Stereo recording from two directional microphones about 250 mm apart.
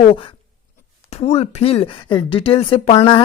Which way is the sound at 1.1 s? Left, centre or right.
Left.